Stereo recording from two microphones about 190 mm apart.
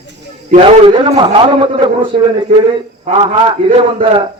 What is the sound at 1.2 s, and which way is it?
Speech, 25° right (ahead or behind).